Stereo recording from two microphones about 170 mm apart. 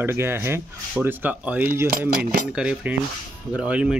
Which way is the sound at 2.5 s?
5° right (ahead or behind).